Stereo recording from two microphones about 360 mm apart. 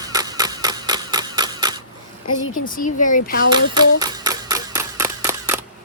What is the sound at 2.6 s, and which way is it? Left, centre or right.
Speech, left.